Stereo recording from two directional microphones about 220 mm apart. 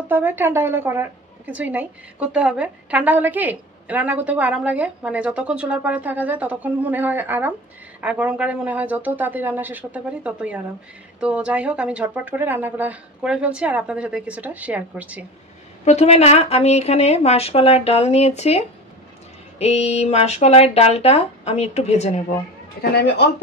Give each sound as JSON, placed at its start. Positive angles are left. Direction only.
{"t": 0.1, "sound": "a woman's voice", "side_deg": -10}
{"t": 15.8, "sound": "a woman's voice", "side_deg": 30}
{"t": 22.8, "sound": "speech", "side_deg": 50}